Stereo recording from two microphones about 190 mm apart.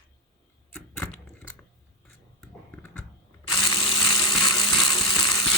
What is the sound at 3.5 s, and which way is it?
Electric toothbrush, 25° left (ahead or behind).